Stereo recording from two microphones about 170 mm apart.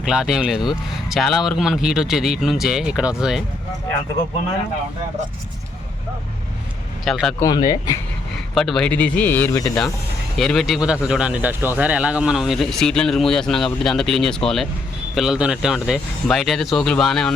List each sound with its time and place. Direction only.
0.0 s speech: 5° right (ahead or behind)
7.0 s speech: centre (ahead or behind)
7.3 s speech: 20° left (ahead or behind)
8.5 s speech: centre (ahead or behind)
9.6 s speech: 5° left (ahead or behind)